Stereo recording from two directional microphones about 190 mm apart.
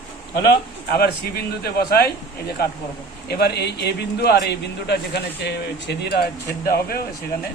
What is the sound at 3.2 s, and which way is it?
A man's voice, 60° left (ahead or behind).